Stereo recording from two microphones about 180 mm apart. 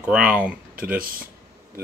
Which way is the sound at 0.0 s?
10° right (ahead or behind).